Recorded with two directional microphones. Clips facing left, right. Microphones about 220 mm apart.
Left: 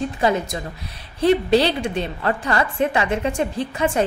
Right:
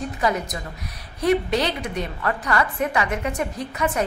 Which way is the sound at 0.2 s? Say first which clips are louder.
Left 3 dB; 30° left (ahead or behind).